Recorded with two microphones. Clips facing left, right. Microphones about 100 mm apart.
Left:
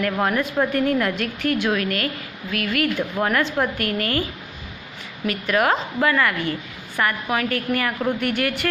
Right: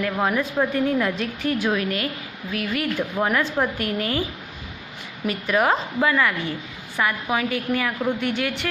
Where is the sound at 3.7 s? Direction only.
60° left (ahead or behind).